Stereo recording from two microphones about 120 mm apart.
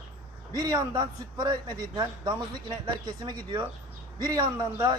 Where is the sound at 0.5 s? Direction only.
30° right (ahead or behind).